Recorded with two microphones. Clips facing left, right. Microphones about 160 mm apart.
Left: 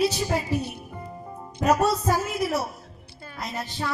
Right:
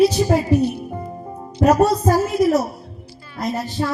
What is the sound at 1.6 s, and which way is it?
Speech, 40° right (ahead or behind).